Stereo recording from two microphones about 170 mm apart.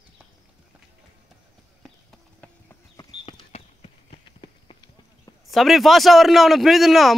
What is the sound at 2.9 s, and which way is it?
Clip-clop, 25° left (ahead or behind).